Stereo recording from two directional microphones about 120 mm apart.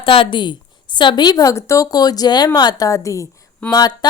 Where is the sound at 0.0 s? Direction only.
50° left (ahead or behind).